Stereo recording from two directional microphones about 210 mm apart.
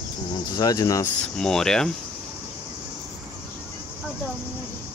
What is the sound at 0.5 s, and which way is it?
Speech, 15° left (ahead or behind).